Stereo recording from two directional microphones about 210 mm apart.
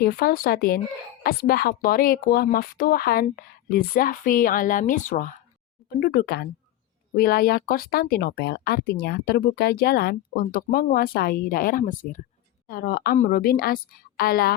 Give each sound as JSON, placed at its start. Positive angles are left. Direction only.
{"t": 0.0, "sound": "speech", "side_deg": 45}